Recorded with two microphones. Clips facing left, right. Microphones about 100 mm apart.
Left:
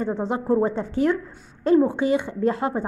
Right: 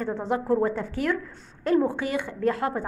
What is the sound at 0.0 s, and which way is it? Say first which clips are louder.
Speech: left 2 dB; 20° left (ahead or behind).